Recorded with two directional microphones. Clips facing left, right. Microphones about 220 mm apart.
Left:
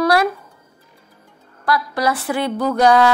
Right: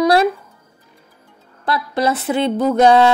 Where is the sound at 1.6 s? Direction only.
25° right (ahead or behind).